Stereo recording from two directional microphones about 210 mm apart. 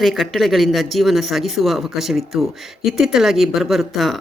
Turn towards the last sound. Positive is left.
turn(degrees=0)  # may be behind; listen again after turning